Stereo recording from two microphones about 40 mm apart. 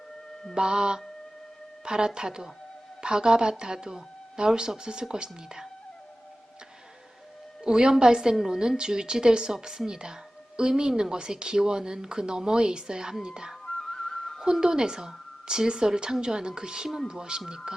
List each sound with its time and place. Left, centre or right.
0.5 s a woman's voice: right
7.6 s a woman's voice: centre
13.7 s music: centre
14.4 s a woman's voice: centre